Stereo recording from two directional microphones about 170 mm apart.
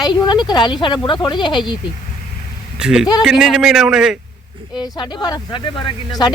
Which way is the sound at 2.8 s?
5° right (ahead or behind).